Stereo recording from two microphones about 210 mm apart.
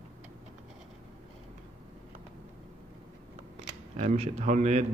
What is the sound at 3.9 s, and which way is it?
Speech, 30° right (ahead or behind).